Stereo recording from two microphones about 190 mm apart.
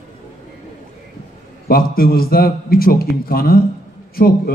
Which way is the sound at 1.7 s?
50° left (ahead or behind).